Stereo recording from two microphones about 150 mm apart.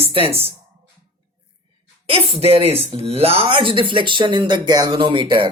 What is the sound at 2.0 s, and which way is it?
A woman's voice, 40° right (ahead or behind).